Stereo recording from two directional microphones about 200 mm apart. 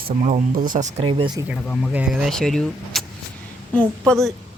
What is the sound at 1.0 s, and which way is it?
Speech, 25° right (ahead or behind).